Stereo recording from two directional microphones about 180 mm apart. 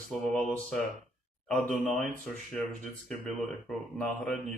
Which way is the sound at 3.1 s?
Centre (ahead or behind).